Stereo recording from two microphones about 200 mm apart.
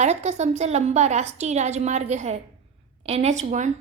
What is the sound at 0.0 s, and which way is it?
A woman's voice, 35° right (ahead or behind).